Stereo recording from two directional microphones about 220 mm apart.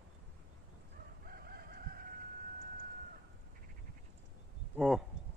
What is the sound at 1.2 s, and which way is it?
Chicken, 45° right (ahead or behind).